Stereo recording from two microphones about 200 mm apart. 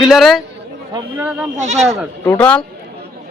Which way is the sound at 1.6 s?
35° right (ahead or behind).